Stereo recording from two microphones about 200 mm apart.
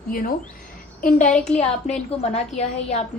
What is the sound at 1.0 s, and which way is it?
Speech, 40° left (ahead or behind).